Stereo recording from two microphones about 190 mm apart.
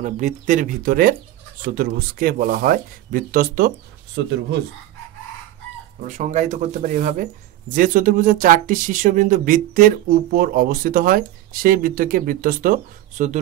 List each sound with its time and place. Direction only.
0.0 s speech: 40° right (ahead or behind); by 4.6 s 65° right (ahead or behind)
6.0 s speech: 40° right (ahead or behind)